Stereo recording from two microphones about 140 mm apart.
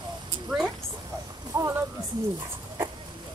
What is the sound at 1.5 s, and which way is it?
Speech, 20° right (ahead or behind).